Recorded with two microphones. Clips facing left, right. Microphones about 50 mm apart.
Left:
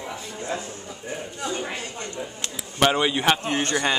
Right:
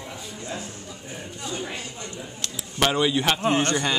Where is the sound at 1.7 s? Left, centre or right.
Left.